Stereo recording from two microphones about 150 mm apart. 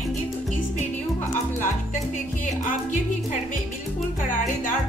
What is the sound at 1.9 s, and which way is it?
Music, 60° left (ahead or behind).